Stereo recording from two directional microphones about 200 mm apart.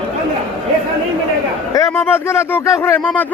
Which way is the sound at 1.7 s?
15° left (ahead or behind).